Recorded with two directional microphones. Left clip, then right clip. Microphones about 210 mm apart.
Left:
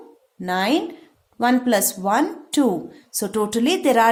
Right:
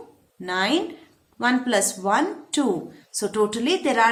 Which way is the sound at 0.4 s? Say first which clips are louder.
Left 2 dB; 40° left (ahead or behind).